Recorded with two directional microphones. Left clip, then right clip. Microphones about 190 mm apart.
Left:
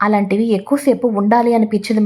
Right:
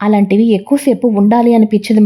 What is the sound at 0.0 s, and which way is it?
A woman's voice, 30° right (ahead or behind).